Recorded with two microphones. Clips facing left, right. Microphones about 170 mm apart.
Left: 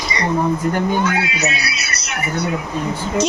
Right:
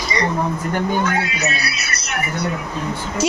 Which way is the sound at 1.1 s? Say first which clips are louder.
Left 1 dB; 45° right (ahead or behind).